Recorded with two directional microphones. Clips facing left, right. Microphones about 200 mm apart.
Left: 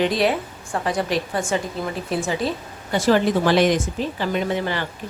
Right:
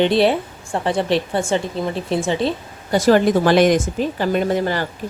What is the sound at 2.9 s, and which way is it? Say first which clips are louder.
Speech: right 4 dB; 45° right (ahead or behind).